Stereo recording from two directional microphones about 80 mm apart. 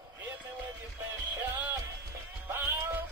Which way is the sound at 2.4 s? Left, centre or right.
Right.